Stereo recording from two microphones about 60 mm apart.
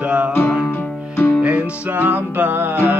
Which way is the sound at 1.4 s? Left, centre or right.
Right.